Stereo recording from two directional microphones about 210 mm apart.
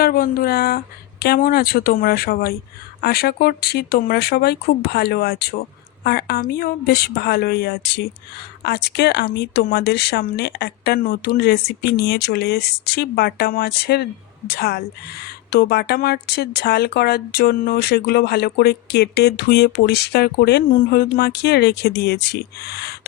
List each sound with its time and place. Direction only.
0.0 s speech: 45° left (ahead or behind)